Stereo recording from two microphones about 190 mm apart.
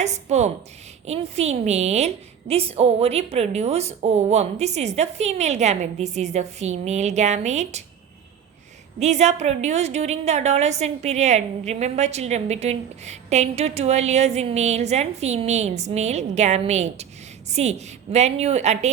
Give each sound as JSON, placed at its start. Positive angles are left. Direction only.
{"t": 0.0, "sound": "a woman's voice", "side_deg": -35}
{"t": 9.0, "sound": "a woman's voice", "side_deg": -35}